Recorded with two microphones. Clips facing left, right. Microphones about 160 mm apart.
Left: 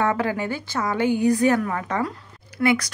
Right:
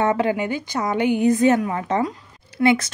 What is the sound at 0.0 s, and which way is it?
Speech, 20° right (ahead or behind).